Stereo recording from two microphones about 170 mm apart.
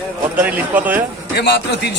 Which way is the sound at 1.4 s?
75° left (ahead or behind).